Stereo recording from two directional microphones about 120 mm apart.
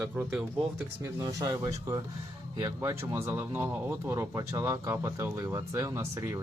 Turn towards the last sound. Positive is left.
turn(degrees=-20)  # may be behind; listen again after turning